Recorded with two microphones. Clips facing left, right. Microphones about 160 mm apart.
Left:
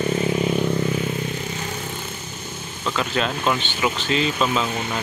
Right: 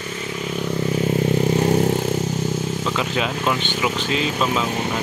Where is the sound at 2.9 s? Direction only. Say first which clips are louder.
Left 3 dB; 10° right (ahead or behind).